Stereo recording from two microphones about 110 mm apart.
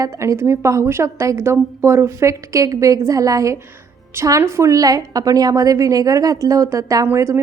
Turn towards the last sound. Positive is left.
turn(degrees=-25)  # may be behind; listen again after turning